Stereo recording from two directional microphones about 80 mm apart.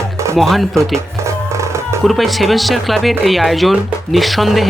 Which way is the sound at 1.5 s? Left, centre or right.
Right.